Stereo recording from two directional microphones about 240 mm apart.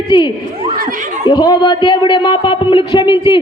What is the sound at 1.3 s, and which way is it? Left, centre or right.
Speech, centre.